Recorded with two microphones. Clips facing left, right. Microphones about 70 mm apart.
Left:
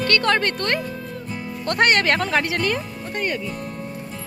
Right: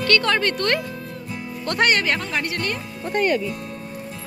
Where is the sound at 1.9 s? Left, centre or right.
Left.